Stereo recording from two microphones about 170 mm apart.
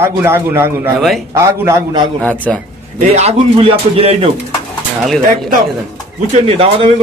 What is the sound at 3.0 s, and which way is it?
A man's voice, 40° right (ahead or behind).